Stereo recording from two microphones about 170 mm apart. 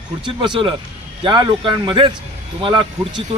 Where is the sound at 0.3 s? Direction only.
25° right (ahead or behind).